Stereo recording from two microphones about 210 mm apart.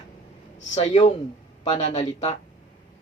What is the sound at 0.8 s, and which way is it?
Speech, 35° left (ahead or behind).